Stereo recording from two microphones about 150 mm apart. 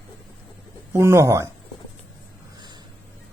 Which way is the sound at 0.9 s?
15° right (ahead or behind).